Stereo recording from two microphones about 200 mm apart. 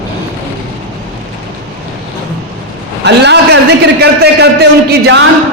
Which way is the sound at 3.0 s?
60° right (ahead or behind).